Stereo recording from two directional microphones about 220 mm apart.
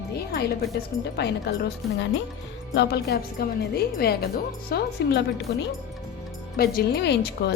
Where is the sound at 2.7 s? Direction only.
50° left (ahead or behind).